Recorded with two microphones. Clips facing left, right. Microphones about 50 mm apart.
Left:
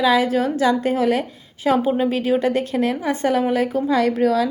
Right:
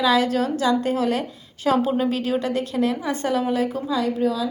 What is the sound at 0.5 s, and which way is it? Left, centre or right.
A woman's voice, left.